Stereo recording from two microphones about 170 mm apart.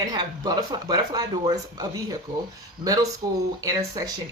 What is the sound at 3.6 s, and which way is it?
Speech, 20° right (ahead or behind).